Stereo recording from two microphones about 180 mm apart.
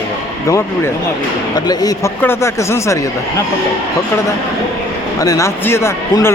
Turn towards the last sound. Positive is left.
turn(degrees=15)  # may be behind; listen again after turning